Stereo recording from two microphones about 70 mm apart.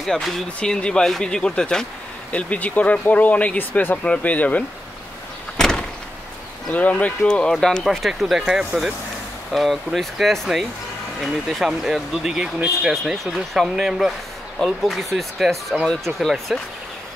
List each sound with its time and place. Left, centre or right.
0.0 s speech: centre
0.6 s speech: centre
5.6 s vehicle: centre
6.7 s speech: left
7.8 s speech: centre